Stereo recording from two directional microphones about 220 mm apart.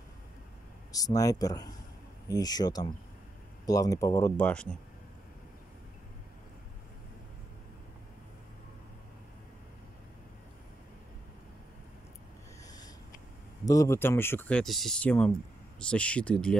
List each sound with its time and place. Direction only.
0.9 s speech: 15° left (ahead or behind)
13.7 s speech: 15° left (ahead or behind)